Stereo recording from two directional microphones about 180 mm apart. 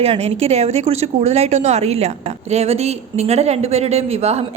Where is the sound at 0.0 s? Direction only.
35° right (ahead or behind).